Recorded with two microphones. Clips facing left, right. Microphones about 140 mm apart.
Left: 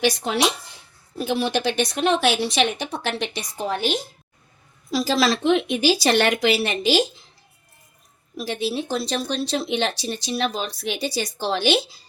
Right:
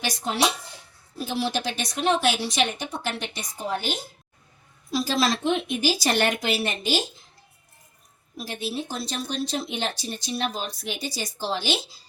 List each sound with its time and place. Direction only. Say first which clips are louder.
0.0 s speech: left 4 dB; 70° left (ahead or behind)
4.9 s speech: left 3 dB; 90° left
8.4 s speech: left 5 dB; 90° left; by 11.9 s 65° left (ahead or behind)